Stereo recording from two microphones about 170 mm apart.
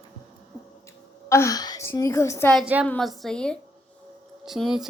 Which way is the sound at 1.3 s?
15° left (ahead or behind).